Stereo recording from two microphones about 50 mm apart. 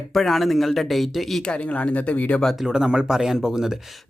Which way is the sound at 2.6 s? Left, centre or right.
Centre.